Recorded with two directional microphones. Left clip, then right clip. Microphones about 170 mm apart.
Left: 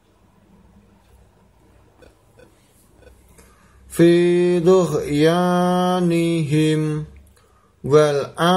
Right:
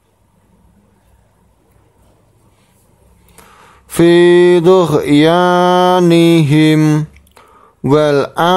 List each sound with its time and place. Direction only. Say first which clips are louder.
3.9 s mantra: right 7 dB; 50° right (ahead or behind)